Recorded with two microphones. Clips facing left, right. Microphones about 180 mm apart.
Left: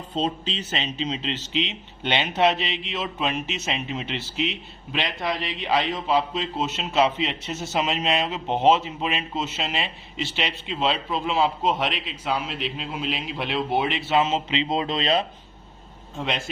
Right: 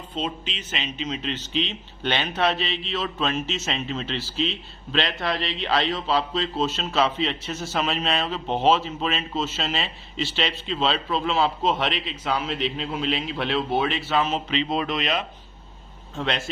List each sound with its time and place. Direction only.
0.1 s speech: 35° left (ahead or behind)
16.1 s speech: 15° left (ahead or behind)